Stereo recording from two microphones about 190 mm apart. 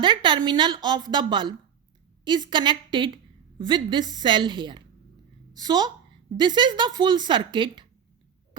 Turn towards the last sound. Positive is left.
turn(degrees=-25)  # may be behind; listen again after turning